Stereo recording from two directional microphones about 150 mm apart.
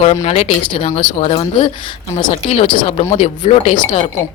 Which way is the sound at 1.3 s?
35° left (ahead or behind).